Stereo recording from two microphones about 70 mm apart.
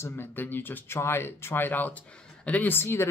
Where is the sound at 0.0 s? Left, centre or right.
Left.